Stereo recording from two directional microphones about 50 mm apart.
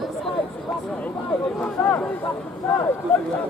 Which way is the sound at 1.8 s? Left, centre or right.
Left.